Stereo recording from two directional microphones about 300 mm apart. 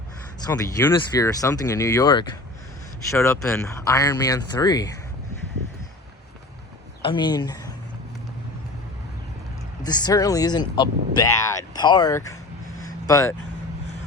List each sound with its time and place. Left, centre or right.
0.4 s speech: centre
7.0 s speech: centre
9.8 s speech: centre